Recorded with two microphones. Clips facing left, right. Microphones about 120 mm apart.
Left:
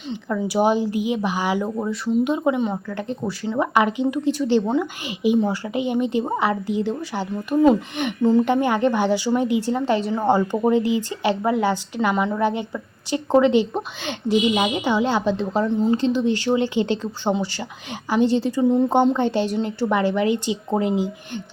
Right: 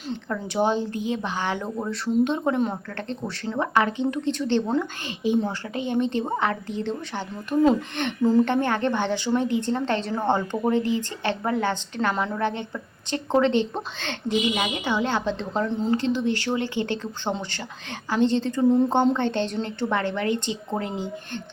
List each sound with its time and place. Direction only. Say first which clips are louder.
0.1 s a woman's voice: left 5 dB; 5° left (ahead or behind)
3.8 s a woman's voice: left 2 dB; 15° left (ahead or behind)
18.6 s a woman's voice: even; centre (ahead or behind)
18.9 s a woman's voice: left 3 dB; 10° left (ahead or behind)